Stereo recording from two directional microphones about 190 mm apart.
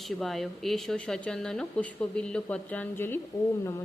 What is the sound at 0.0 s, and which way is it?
A woman's voice, centre (ahead or behind).